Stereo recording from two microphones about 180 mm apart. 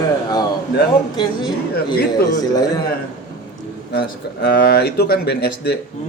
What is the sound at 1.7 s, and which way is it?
Speech, 60° left (ahead or behind).